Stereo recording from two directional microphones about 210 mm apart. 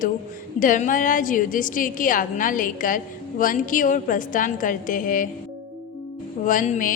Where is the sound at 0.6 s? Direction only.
40° left (ahead or behind).